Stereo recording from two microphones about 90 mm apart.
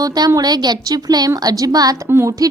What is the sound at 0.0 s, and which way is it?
A child's voice, 50° right (ahead or behind).